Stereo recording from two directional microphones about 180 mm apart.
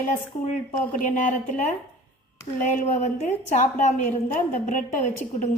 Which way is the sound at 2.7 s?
40° left (ahead or behind).